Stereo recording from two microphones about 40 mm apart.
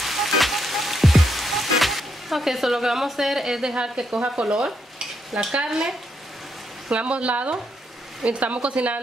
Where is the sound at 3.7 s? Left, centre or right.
Right.